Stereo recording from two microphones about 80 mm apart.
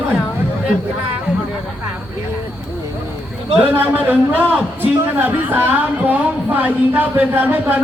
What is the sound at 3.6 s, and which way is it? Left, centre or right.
Speech, right.